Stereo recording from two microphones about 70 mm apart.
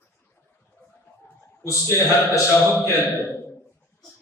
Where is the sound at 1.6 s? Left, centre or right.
Left.